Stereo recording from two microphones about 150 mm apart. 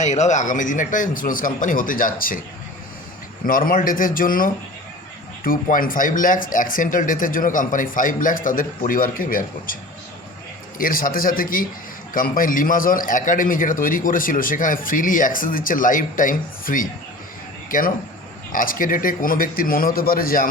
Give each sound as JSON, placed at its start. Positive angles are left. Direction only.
{"t": 0.0, "sound": "a man's voice", "side_deg": 50}
{"t": 3.4, "sound": "a man's voice", "side_deg": 70}
{"t": 10.8, "sound": "a man's voice", "side_deg": 70}